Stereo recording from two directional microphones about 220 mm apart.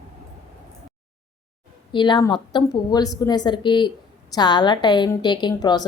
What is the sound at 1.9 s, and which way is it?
A woman's voice, 20° left (ahead or behind).